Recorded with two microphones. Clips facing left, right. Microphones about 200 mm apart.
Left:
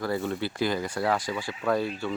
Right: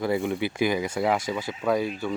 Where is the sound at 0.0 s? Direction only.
15° right (ahead or behind).